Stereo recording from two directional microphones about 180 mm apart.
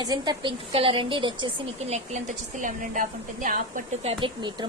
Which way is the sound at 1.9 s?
40° right (ahead or behind).